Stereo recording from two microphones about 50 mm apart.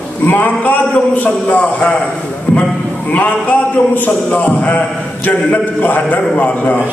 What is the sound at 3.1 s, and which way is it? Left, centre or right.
A man's voice, left.